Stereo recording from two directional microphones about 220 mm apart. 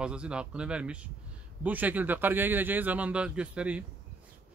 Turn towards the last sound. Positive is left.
turn(degrees=-5)  # may be behind; listen again after turning